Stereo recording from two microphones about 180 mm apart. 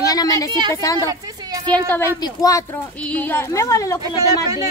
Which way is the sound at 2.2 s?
20° left (ahead or behind).